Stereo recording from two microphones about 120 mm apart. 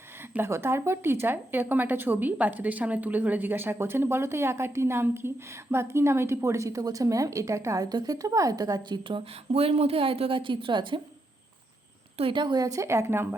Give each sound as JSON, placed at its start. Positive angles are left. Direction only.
{"t": 0.3, "sound": "a woman's voice", "side_deg": -20}
{"t": 9.5, "sound": "a woman's voice", "side_deg": -55}
{"t": 12.1, "sound": "a woman's voice", "side_deg": -45}